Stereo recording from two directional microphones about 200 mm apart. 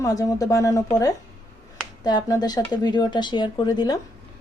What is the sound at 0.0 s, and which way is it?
Speech, 15° left (ahead or behind).